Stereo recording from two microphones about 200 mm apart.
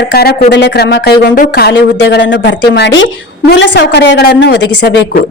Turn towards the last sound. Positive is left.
turn(degrees=60)  # may be behind; listen again after turning